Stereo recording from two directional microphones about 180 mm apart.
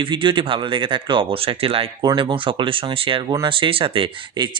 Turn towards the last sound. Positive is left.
turn(degrees=-25)  # may be behind; listen again after turning